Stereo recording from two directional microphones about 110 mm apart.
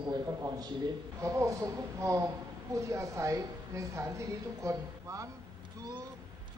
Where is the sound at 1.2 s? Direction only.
30° right (ahead or behind).